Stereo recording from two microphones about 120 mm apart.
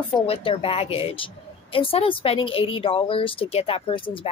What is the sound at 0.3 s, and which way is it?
Speech, 50° left (ahead or behind).